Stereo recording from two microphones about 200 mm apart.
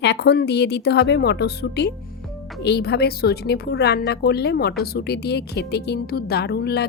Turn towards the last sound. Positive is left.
turn(degrees=55)  # may be behind; listen again after turning